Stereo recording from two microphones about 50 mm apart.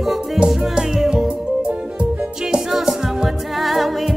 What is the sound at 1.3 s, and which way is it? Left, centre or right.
Music, centre.